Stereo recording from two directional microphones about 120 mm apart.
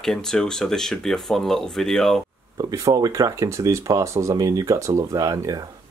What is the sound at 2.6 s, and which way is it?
Speech, 30° right (ahead or behind).